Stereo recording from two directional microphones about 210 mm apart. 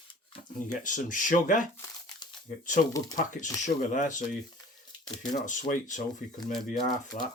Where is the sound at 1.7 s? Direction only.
10° left (ahead or behind).